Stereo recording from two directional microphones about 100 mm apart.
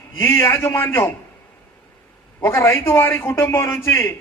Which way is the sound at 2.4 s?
25° left (ahead or behind).